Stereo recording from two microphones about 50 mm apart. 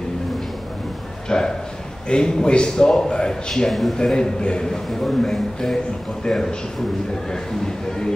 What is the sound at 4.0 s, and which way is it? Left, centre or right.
A man's voice, centre.